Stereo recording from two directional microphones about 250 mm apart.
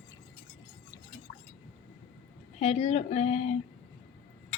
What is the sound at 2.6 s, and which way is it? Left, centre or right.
Cutlery, left.